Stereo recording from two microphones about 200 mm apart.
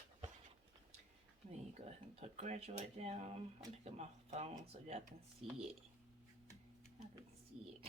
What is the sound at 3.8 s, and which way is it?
Speech, 35° right (ahead or behind).